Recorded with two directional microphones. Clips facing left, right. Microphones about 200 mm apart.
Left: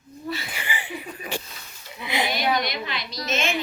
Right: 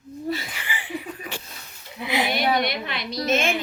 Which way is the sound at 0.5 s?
15° left (ahead or behind).